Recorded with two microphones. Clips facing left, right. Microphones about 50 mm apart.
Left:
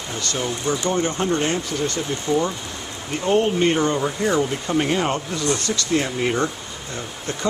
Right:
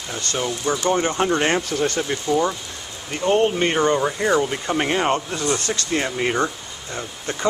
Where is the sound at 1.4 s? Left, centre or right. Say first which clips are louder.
Right 3 dB; right.